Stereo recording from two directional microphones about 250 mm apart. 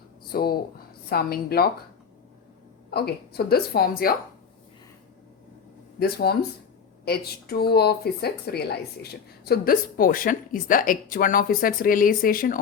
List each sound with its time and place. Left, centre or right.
0.3 s speech: left
2.9 s speech: left
6.0 s speech: left